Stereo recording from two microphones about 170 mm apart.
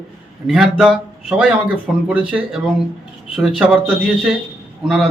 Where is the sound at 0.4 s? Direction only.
Centre (ahead or behind).